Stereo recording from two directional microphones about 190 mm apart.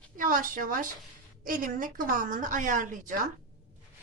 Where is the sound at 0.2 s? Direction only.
45° right (ahead or behind).